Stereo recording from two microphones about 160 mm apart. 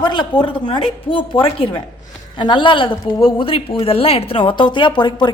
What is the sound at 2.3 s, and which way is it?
A woman's voice, 30° left (ahead or behind).